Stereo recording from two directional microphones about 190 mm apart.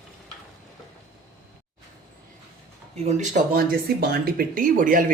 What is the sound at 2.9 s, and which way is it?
Speech, 35° right (ahead or behind).